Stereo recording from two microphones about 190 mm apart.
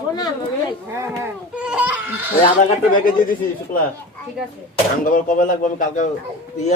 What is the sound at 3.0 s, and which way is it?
Speech, 45° left (ahead or behind).